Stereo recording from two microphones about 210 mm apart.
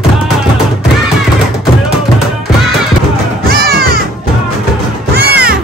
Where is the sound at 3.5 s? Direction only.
45° right (ahead or behind).